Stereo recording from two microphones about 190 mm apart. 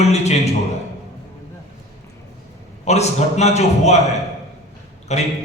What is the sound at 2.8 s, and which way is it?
A man's voice, 35° left (ahead or behind).